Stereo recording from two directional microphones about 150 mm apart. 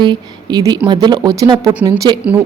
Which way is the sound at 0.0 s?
30° right (ahead or behind).